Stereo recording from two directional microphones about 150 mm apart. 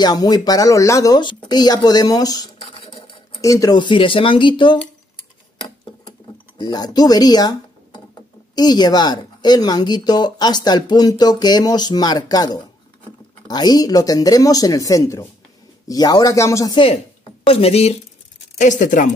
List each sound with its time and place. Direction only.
0.0 s speech: 25° left (ahead or behind)
2.6 s a sound: 35° left (ahead or behind)
3.3 s speech: 20° left (ahead or behind)
6.6 s speech: 25° left (ahead or behind)
16.7 s speech: 40° left (ahead or behind)
18.6 s speech: 55° left (ahead or behind)